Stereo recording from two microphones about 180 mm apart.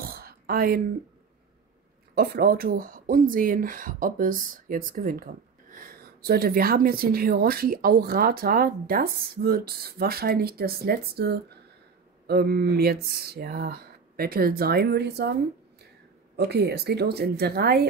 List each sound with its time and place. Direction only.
0.0 s a sound: 55° right (ahead or behind)
2.1 s speech: 55° right (ahead or behind)
16.3 s speech: 65° right (ahead or behind)